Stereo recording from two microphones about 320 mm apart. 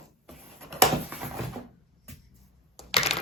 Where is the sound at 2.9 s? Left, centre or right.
Centre.